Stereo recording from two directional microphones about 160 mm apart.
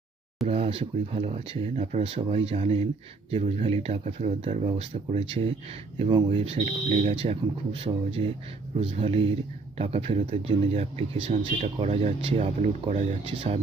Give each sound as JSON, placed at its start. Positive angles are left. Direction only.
{"t": 0.4, "sound": "speech", "side_deg": -35}